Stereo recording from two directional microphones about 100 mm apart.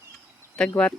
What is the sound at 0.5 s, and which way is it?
Speech, 10° left (ahead or behind).